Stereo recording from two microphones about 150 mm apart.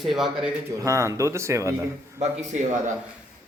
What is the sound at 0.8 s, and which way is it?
Speech, 20° right (ahead or behind).